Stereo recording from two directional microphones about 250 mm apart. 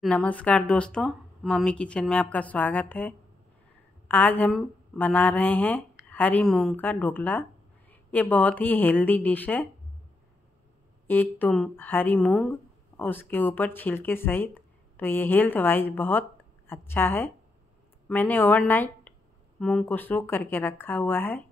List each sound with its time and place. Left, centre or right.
0.0 s speech: centre
11.1 s speech: centre